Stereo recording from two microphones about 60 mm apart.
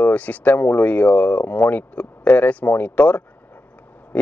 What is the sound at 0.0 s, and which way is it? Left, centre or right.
Speech, left.